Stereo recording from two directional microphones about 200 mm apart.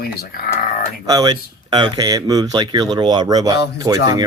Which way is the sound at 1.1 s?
20° right (ahead or behind).